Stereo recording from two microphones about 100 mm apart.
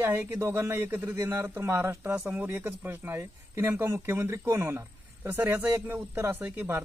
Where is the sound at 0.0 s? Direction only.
20° right (ahead or behind).